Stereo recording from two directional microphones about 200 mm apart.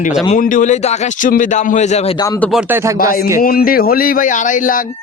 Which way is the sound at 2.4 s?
Centre (ahead or behind).